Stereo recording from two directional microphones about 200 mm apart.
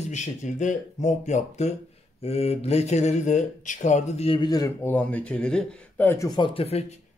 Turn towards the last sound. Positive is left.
turn(degrees=30)  # may be behind; listen again after turning